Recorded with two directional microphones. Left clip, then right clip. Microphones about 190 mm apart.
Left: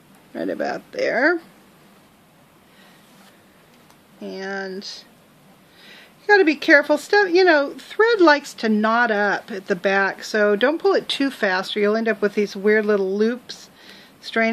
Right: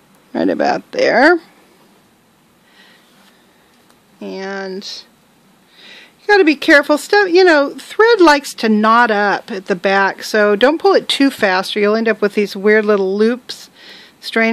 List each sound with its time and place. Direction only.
0.3 s speech: 45° right (ahead or behind)
4.2 s speech: 50° right (ahead or behind)